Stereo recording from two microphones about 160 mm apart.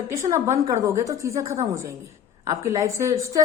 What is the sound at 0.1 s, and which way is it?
A woman's voice, 15° right (ahead or behind).